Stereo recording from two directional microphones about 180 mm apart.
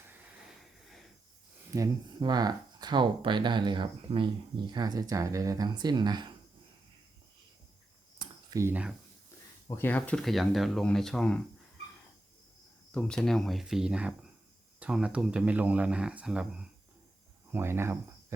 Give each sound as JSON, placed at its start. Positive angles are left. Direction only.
{"t": 1.7, "sound": "speech", "side_deg": -20}
{"t": 8.2, "sound": "a sound", "side_deg": -20}
{"t": 9.6, "sound": "speech", "side_deg": 10}
{"t": 12.9, "sound": "speech", "side_deg": 5}